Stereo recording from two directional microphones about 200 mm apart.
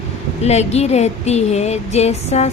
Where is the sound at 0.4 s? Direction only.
35° left (ahead or behind).